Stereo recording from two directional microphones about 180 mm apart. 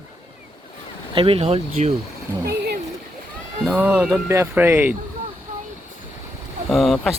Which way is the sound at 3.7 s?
10° right (ahead or behind).